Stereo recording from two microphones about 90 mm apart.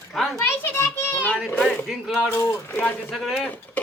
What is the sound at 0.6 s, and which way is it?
Speech, 25° left (ahead or behind).